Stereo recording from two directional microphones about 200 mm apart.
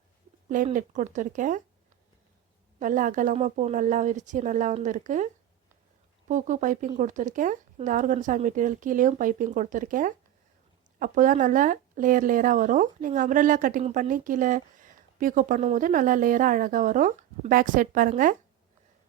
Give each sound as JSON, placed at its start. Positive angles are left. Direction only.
{"t": 0.4, "sound": "speech", "side_deg": -40}
{"t": 2.7, "sound": "speech", "side_deg": -40}